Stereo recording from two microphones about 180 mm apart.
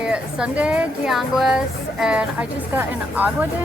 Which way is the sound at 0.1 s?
5° right (ahead or behind).